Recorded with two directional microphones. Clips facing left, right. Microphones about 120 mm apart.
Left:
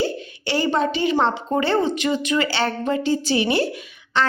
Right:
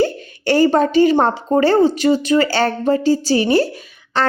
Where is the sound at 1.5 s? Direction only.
40° right (ahead or behind).